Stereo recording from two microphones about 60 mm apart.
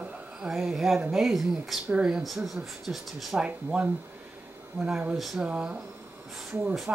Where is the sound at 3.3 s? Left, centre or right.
Centre.